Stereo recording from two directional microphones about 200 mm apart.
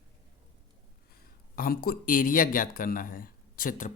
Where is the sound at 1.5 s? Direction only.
45° left (ahead or behind).